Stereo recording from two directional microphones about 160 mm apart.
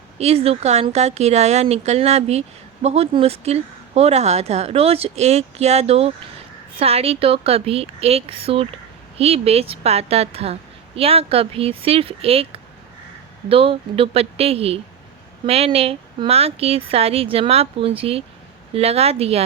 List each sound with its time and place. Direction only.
0.2 s a woman's voice: 40° right (ahead or behind)